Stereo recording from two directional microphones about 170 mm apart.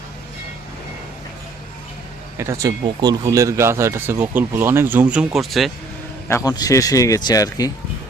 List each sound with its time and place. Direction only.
2.4 s speech: 20° right (ahead or behind); by 5.7 s centre (ahead or behind)
6.2 s speech: 20° left (ahead or behind)